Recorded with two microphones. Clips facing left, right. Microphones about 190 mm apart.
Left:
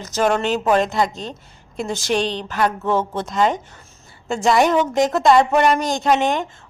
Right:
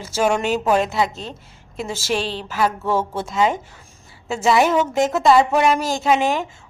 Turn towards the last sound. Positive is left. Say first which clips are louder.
# even
turn(degrees=-5)  # may be behind; listen again after turning